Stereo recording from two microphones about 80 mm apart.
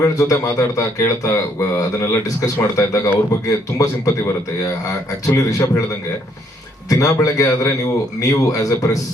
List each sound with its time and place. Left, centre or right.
0.0 s a man's voice: left
5.4 s a man's voice: left
6.9 s a man's voice: left